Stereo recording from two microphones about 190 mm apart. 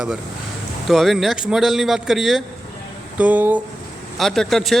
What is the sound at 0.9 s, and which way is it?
Speech, centre (ahead or behind).